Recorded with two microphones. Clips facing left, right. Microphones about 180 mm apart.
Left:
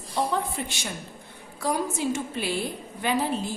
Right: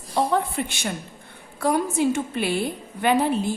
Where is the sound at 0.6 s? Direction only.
65° right (ahead or behind).